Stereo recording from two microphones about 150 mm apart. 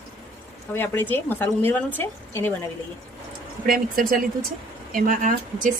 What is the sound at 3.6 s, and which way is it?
Speech, 75° right (ahead or behind).